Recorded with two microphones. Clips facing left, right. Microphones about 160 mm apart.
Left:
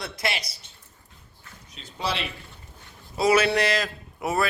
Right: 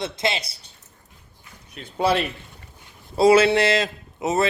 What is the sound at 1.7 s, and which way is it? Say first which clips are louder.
Speech: right 9 dB; 60° right (ahead or behind).